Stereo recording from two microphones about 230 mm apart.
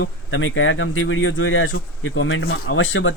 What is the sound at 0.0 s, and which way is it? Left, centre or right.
Speech, left.